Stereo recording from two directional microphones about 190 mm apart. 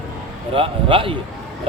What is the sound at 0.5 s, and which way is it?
Speech, 25° right (ahead or behind).